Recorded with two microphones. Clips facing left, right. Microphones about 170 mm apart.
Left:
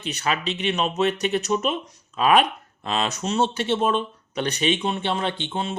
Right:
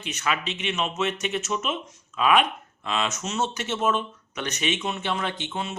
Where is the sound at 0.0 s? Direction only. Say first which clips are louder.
Left 3 dB; 35° left (ahead or behind).